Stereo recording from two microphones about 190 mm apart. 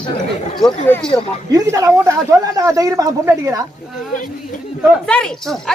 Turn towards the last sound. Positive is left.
turn(degrees=5)  # may be behind; listen again after turning